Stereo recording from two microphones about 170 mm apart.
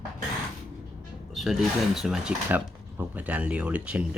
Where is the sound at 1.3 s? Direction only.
Centre (ahead or behind).